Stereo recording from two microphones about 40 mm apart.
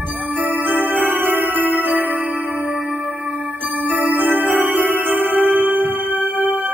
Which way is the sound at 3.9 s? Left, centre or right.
Right.